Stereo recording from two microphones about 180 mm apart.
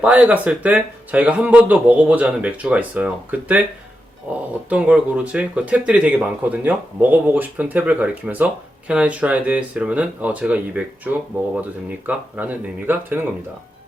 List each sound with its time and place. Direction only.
0.0 s speech: 5° right (ahead or behind)